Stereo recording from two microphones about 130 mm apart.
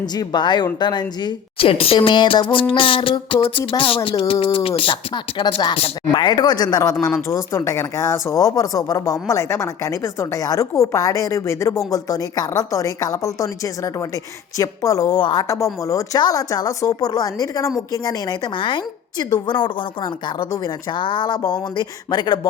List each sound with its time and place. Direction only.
0.0 s a woman's voice: 30° left (ahead or behind)